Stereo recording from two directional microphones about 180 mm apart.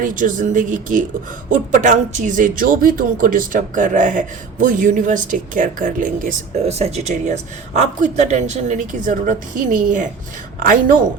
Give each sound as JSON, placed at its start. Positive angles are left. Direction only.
{"t": 0.0, "sound": "speech", "side_deg": -45}